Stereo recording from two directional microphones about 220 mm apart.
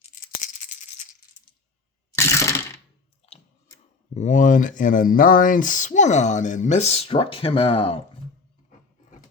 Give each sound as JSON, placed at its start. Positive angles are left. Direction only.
{"t": 0.1, "sound": "a sound", "side_deg": 35}
{"t": 2.1, "sound": "coin", "side_deg": 15}
{"t": 3.3, "sound": "chewing", "side_deg": 30}
{"t": 4.1, "sound": "speech", "side_deg": 35}